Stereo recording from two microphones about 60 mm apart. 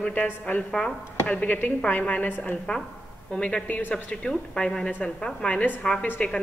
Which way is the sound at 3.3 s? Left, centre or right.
Centre.